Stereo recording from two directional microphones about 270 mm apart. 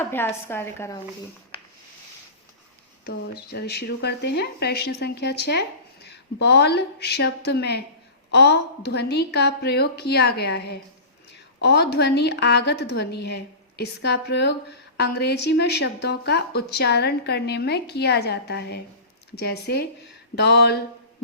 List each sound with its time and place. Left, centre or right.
0.0 s a woman's voice: centre
3.1 s speech: left